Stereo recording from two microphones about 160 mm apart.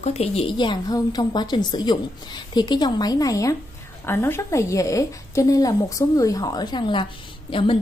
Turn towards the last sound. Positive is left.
turn(degrees=35)  # may be behind; listen again after turning